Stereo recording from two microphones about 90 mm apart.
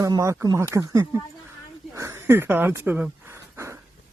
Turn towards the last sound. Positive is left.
turn(degrees=-30)  # may be behind; listen again after turning